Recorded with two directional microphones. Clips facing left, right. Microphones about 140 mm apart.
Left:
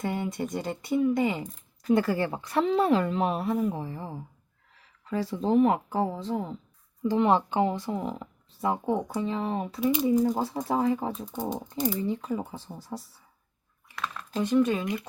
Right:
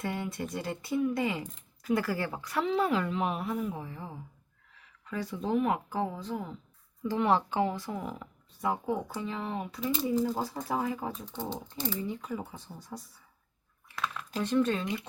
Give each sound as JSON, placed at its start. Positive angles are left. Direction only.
{"t": 0.0, "sound": "speech", "side_deg": 20}
{"t": 12.0, "sound": "speech", "side_deg": 30}
{"t": 13.9, "sound": "computer keyboard", "side_deg": 0}
{"t": 14.3, "sound": "speech", "side_deg": 10}